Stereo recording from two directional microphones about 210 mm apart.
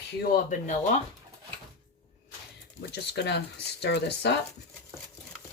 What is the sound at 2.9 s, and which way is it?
Speech, 55° left (ahead or behind).